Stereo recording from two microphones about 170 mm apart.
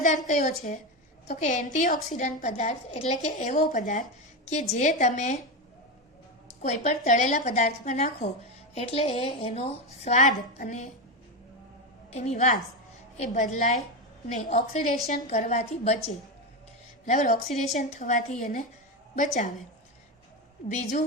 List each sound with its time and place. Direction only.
0.3 s a woman's voice: 45° left (ahead or behind)
6.6 s a woman's voice: 45° left (ahead or behind)
12.1 s a woman's voice: 40° left (ahead or behind)
20.7 s a woman's voice: 45° left (ahead or behind)